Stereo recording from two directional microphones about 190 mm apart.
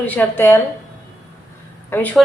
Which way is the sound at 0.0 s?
10° left (ahead or behind).